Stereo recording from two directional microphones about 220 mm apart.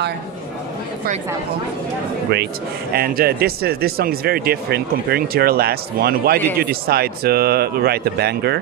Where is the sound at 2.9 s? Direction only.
45° right (ahead or behind).